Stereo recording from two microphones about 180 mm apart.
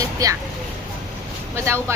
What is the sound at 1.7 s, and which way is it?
Speech, 15° right (ahead or behind).